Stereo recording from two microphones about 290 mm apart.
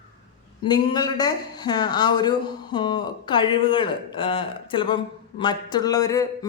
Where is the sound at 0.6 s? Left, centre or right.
Centre.